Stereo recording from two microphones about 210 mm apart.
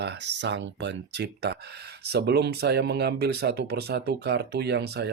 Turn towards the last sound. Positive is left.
turn(degrees=-50)  # may be behind; listen again after turning